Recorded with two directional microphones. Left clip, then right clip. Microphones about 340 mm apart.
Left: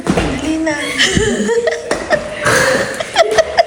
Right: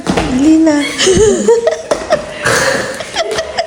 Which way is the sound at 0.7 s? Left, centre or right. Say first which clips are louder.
Right 3 dB; centre.